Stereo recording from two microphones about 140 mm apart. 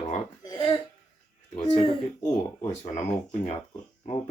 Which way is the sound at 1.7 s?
40° left (ahead or behind).